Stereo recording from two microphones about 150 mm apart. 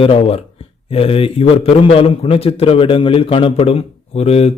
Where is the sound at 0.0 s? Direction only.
40° left (ahead or behind).